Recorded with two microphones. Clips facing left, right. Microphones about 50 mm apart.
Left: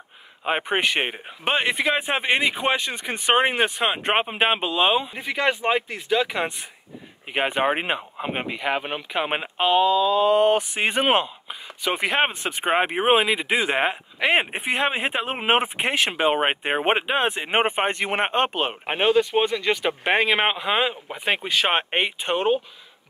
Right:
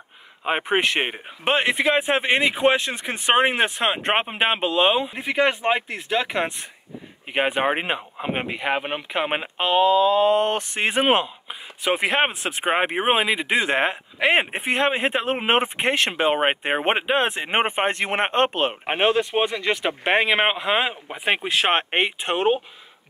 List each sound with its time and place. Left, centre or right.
0.4 s speech: centre
5.2 s speech: centre
7.3 s speech: centre
9.8 s a sound: right
10.3 s speech: centre
18.9 s speech: centre